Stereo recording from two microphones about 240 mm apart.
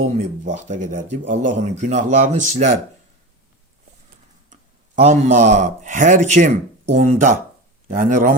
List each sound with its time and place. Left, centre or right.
0.0 s speech: right
4.9 s speech: right